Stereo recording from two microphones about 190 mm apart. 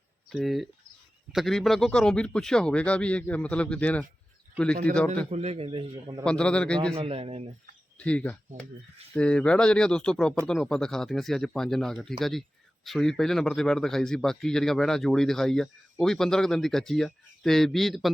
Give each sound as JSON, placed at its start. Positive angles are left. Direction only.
{"t": 0.3, "sound": "a man's voice", "side_deg": 0}
{"t": 5.3, "sound": "a man's voice", "side_deg": -35}
{"t": 6.2, "sound": "speech", "side_deg": 5}
{"t": 6.9, "sound": "speech", "side_deg": -30}
{"t": 7.9, "sound": "speech", "side_deg": 5}